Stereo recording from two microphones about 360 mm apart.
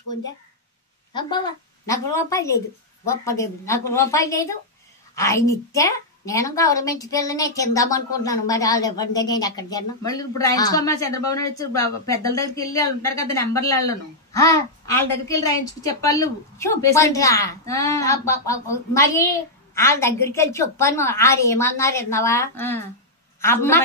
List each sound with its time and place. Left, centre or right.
1.1 s a woman's voice: centre